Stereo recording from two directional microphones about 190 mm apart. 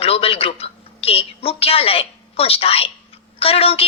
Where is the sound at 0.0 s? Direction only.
30° left (ahead or behind).